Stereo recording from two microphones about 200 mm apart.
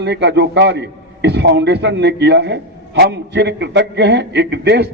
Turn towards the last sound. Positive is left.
turn(degrees=-55)  # may be behind; listen again after turning